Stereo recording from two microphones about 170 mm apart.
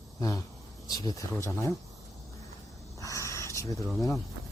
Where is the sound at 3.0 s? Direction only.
20° left (ahead or behind).